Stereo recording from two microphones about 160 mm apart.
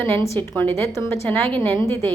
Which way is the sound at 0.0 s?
15° left (ahead or behind).